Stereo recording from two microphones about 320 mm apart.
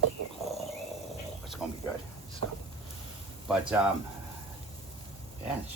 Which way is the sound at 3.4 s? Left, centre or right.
Centre.